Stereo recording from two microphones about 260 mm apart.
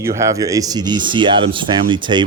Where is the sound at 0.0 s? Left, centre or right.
Centre.